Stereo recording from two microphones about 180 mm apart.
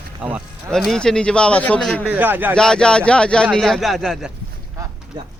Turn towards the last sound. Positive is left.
turn(degrees=0)  # may be behind; listen again after turning